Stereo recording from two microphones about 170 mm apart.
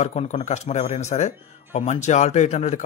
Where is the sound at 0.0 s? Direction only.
40° left (ahead or behind).